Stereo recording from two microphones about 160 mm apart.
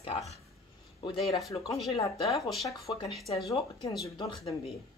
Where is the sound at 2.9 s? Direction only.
30° left (ahead or behind).